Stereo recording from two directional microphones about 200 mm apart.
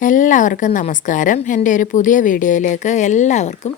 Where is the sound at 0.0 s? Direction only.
40° left (ahead or behind).